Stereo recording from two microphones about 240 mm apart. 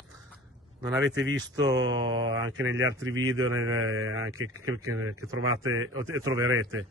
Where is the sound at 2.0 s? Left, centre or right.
Right.